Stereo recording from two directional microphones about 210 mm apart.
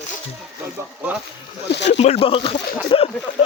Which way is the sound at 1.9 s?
30° left (ahead or behind).